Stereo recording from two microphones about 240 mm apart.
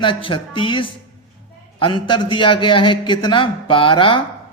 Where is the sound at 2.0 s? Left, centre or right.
Centre.